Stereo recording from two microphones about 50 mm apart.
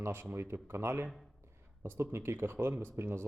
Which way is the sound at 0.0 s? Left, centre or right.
Right.